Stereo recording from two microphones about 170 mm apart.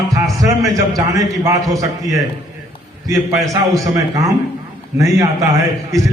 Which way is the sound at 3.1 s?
20° right (ahead or behind).